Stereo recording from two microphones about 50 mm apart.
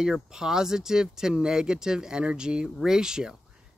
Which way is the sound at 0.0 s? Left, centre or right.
Centre.